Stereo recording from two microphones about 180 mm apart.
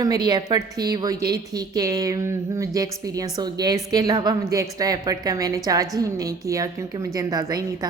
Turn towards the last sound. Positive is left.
turn(degrees=-20)  # may be behind; listen again after turning